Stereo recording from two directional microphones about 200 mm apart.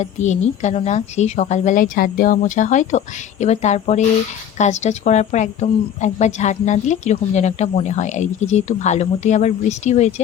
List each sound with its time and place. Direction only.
0.0 s speech: 35° left (ahead or behind)